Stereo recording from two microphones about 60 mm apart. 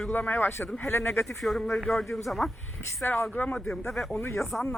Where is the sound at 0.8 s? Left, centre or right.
Left.